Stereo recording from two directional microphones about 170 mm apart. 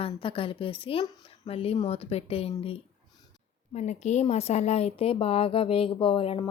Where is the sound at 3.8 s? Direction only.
40° left (ahead or behind).